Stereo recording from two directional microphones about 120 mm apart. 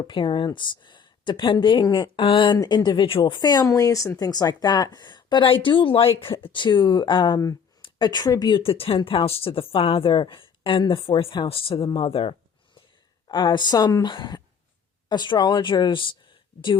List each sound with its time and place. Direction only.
0.0 s speech: 40° left (ahead or behind)
11.9 s a sound: 50° left (ahead or behind)
13.2 s speech: 40° left (ahead or behind)